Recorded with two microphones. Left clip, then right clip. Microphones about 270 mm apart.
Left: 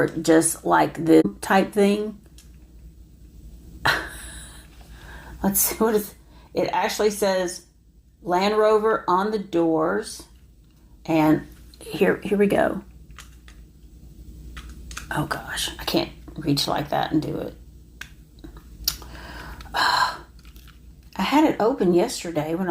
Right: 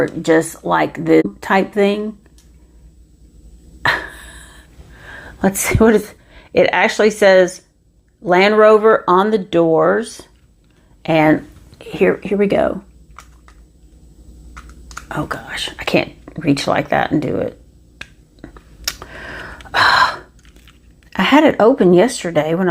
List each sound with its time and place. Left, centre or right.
0.0 s speech: right
3.8 s a sound: right
5.5 s speech: right
11.9 s speech: right
15.1 s speech: right
15.8 s speech: right
19.7 s gasp: right
21.1 s speech: right